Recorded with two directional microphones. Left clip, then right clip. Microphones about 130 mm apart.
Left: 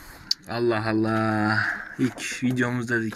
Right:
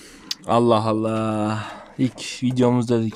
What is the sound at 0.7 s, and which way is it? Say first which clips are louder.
Speech: right 7 dB; 40° right (ahead or behind).